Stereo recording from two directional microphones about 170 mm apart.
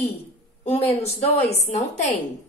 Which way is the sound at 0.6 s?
40° left (ahead or behind).